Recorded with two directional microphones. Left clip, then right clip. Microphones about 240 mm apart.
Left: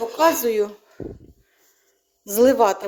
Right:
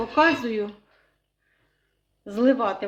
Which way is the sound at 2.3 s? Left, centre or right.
Left.